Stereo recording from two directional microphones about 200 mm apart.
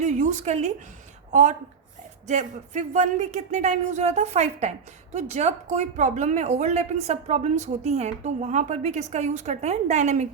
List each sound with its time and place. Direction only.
0.0 s a woman's voice: 35° right (ahead or behind)